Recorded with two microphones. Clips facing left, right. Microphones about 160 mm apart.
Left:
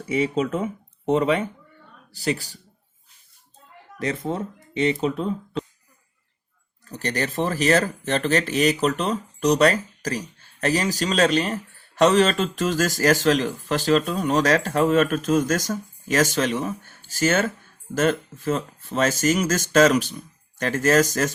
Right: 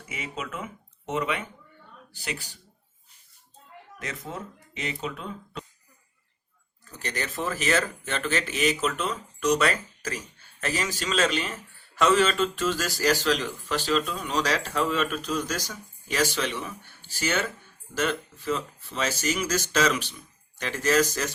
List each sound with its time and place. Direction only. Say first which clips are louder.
0.1 s speech: left 13 dB; 35° left (ahead or behind)
4.0 s speech: left 10 dB; 30° left (ahead or behind)
6.9 s speech: left 7 dB; 35° left (ahead or behind)